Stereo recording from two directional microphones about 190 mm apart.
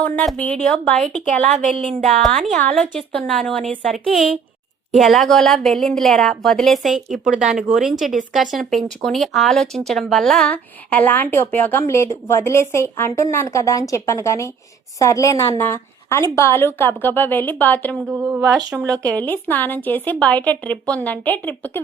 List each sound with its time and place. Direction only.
0.0 s speech: 5° left (ahead or behind)
1.4 s a woman's voice: 40° right (ahead or behind)
2.0 s a woman's voice: centre (ahead or behind)
17.9 s speech: 10° right (ahead or behind)
19.0 s a woman's voice: 10° left (ahead or behind)